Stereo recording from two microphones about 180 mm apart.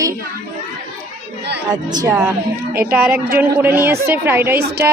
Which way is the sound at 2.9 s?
5° right (ahead or behind).